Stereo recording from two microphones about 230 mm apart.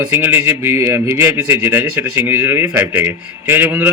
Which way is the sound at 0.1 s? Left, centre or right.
Centre.